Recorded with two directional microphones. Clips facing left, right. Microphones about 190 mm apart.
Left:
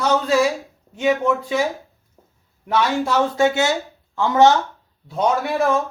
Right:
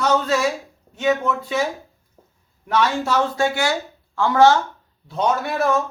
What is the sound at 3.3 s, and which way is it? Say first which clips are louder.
A man's voice: left 3 dB; 20° left (ahead or behind).